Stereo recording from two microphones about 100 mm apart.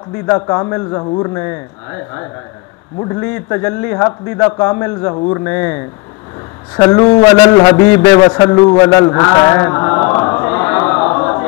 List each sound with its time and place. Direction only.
0.1 s a man's voice: 30° left (ahead or behind)
6.8 s a man's voice: 30° left (ahead or behind)
8.1 s speech: 40° left (ahead or behind)
8.7 s a sound: 35° left (ahead or behind)